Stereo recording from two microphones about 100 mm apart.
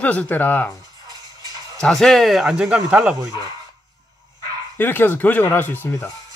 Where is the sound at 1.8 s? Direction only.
5° left (ahead or behind).